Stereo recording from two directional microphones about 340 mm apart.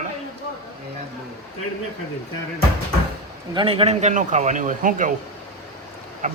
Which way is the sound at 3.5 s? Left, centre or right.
Centre.